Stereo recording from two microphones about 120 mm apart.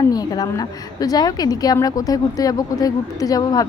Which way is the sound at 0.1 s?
30° left (ahead or behind).